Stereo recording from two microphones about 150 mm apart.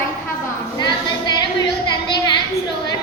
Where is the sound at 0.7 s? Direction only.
30° left (ahead or behind).